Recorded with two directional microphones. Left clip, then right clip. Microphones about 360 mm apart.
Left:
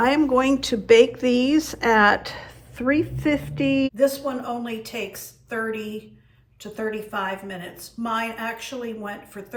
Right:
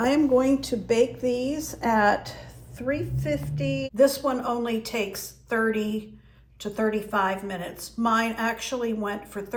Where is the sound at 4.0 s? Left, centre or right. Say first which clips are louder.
Right 1 dB; centre.